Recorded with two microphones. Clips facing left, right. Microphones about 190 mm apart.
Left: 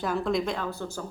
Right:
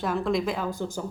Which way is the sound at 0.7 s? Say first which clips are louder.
Right 3 dB; 15° right (ahead or behind).